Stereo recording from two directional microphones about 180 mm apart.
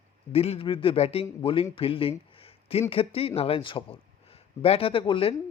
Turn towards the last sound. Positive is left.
turn(degrees=30)  # may be behind; listen again after turning